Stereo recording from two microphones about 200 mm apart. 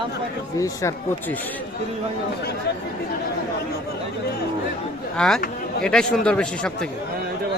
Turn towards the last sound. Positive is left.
turn(degrees=5)  # may be behind; listen again after turning